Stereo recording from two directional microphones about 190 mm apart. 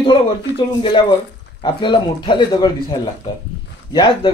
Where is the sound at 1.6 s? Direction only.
25° left (ahead or behind).